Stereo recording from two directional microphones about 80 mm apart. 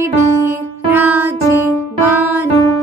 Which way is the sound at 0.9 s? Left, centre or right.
Right.